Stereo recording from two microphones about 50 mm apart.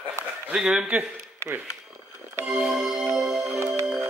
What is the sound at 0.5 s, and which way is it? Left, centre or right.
Speech, centre.